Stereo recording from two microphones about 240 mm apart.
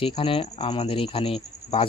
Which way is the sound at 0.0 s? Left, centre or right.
Left.